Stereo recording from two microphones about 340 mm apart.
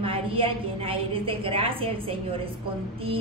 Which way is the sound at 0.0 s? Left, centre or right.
Centre.